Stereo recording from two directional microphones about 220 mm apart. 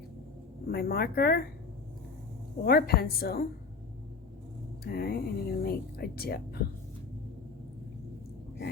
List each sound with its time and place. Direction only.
0.7 s speech: 45° left (ahead or behind)
2.6 s speech: 45° left (ahead or behind)
4.8 s speech: 45° left (ahead or behind)